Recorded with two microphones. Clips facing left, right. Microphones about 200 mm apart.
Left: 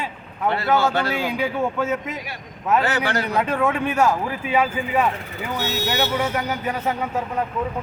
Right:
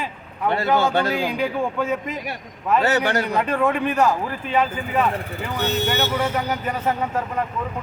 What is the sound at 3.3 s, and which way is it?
Speech, centre (ahead or behind).